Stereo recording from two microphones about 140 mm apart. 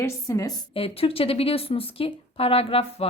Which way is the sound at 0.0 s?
20° left (ahead or behind).